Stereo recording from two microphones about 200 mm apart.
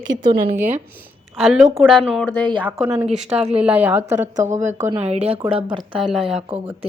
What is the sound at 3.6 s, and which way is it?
Speech, 10° right (ahead or behind).